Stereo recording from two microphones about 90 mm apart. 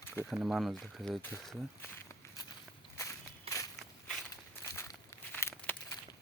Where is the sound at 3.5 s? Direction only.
40° left (ahead or behind).